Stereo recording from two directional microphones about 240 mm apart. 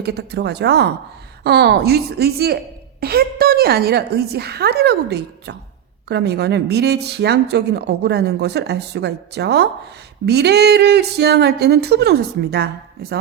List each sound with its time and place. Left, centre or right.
0.0 s a woman's voice: right